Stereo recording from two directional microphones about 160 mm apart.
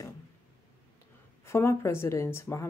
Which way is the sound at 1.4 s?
15° left (ahead or behind).